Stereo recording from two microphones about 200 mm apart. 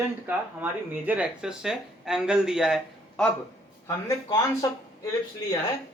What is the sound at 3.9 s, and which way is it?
Speech, 15° left (ahead or behind).